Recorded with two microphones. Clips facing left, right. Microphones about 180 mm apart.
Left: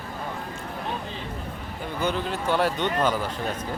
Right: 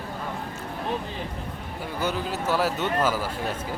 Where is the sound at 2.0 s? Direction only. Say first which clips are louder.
Left 1 dB; 5° right (ahead or behind).